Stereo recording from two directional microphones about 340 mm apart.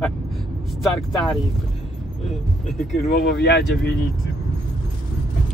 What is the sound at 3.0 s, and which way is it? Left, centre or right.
Speech, left.